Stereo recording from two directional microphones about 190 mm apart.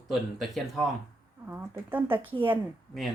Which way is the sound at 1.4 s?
10° right (ahead or behind).